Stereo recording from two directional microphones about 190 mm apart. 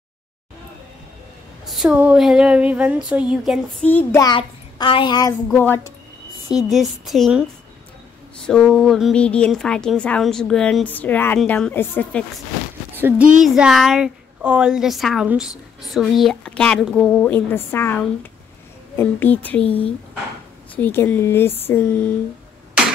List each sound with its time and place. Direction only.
1.7 s a woman's voice: 5° right (ahead or behind)
3.8 s speech: 10° left (ahead or behind)
4.3 s a child's voice: 25° left (ahead or behind)
5.5 s speech: 10° left (ahead or behind)
6.5 s a woman's voice: centre (ahead or behind)
8.5 s a woman's voice: 5° left (ahead or behind)
13.0 s a woman's voice: 5° right (ahead or behind); by 22.1 s 10° left (ahead or behind)